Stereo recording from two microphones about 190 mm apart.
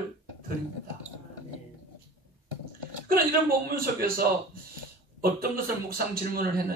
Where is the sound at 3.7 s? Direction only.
50° right (ahead or behind).